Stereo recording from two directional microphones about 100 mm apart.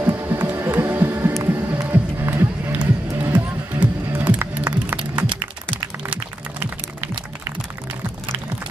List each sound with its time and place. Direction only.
0.0 s a sound: 25° right (ahead or behind)
0.5 s music: 25° right (ahead or behind)
5.3 s music: 55° right (ahead or behind)